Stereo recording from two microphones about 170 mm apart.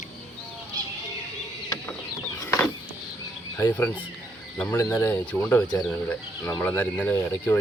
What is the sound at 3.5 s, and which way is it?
Speech, 10° left (ahead or behind).